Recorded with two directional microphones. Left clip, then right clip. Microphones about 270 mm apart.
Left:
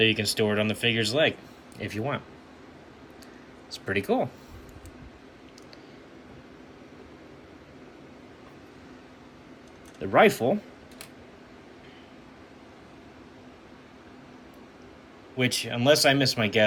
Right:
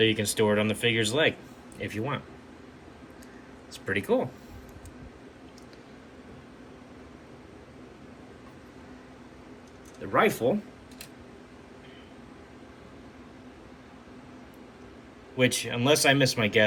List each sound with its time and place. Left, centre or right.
0.0 s speech: centre
3.7 s speech: centre
10.0 s speech: centre
15.4 s speech: centre